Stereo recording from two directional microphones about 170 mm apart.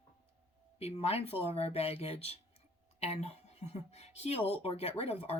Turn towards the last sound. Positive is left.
turn(degrees=35)  # may be behind; listen again after turning